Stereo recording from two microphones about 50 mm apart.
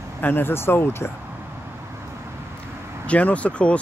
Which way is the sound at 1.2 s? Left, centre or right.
Right.